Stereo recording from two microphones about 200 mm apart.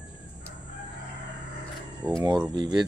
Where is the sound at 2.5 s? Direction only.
20° right (ahead or behind).